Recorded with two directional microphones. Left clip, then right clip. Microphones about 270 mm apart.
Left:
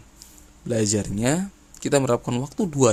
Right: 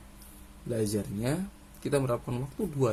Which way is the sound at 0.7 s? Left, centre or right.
Left.